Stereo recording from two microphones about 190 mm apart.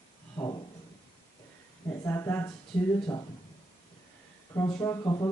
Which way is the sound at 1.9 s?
15° left (ahead or behind).